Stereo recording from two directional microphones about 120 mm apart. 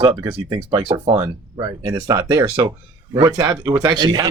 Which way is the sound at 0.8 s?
50° right (ahead or behind).